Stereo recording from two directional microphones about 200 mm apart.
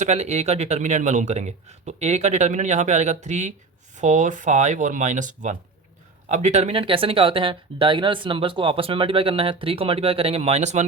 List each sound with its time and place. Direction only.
0.0 s a man's voice: 35° right (ahead or behind)